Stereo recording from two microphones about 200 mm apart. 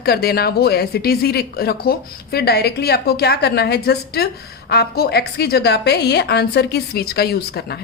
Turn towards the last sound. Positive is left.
turn(degrees=55)  # may be behind; listen again after turning